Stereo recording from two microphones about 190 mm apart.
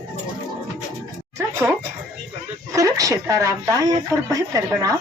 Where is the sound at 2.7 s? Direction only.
20° right (ahead or behind).